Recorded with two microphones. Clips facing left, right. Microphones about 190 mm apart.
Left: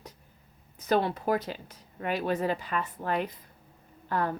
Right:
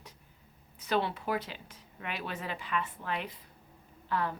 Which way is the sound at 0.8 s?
40° left (ahead or behind).